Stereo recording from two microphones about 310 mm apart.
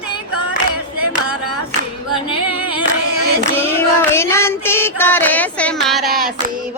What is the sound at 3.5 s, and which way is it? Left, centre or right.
Child singing, centre.